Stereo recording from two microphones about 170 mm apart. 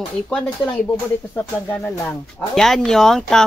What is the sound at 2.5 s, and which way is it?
Speech, centre (ahead or behind).